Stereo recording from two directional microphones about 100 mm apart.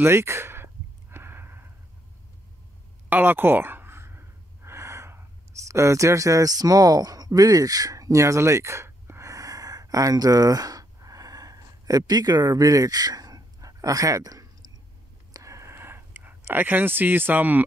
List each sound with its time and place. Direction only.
0.0 s speech: 25° right (ahead or behind)
1.1 s sniff: 25° right (ahead or behind)
3.1 s gasp: 20° right (ahead or behind)
5.7 s speech: 30° right (ahead or behind)
15.3 s a sound: 30° right (ahead or behind)